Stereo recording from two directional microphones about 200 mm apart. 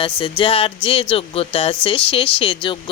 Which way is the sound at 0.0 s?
25° left (ahead or behind).